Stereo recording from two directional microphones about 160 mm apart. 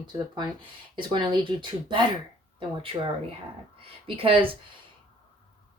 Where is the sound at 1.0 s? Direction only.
30° right (ahead or behind).